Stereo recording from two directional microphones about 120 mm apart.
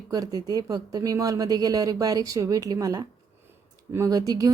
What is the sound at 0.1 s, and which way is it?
A woman's voice, 30° right (ahead or behind).